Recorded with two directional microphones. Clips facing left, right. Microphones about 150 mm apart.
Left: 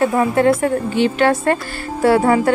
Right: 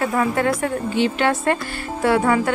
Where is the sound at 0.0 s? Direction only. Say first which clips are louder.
Left 5 dB; 30° left (ahead or behind).